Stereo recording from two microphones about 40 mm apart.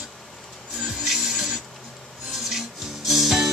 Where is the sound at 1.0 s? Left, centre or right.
Centre.